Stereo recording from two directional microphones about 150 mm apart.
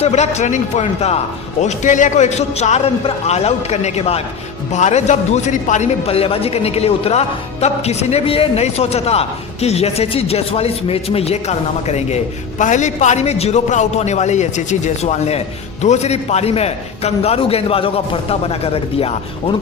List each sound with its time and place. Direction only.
0.0 s a man's voice: 50° left (ahead or behind)
1.6 s a man's voice: 55° left (ahead or behind); by 19.5 s 40° left (ahead or behind)